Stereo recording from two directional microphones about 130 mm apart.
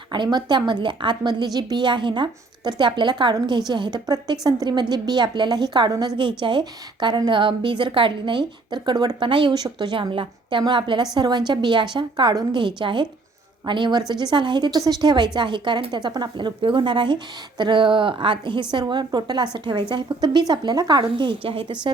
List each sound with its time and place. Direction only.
0.1 s a woman's voice: 35° right (ahead or behind)